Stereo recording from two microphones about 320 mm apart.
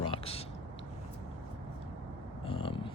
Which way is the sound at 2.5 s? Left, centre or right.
Centre.